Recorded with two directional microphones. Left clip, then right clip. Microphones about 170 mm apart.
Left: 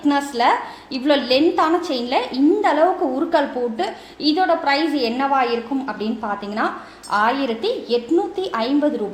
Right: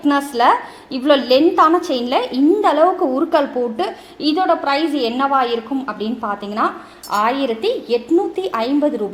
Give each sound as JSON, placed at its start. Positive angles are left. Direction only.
{"t": 0.0, "sound": "a woman's voice", "side_deg": -30}